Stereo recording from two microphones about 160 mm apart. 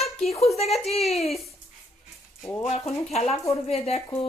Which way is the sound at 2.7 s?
45° left (ahead or behind).